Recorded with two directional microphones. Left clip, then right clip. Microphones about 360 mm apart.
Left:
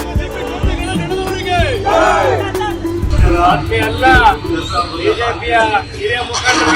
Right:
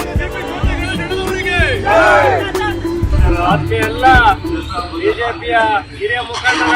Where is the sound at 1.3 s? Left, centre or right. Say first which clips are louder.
Right 1 dB; centre.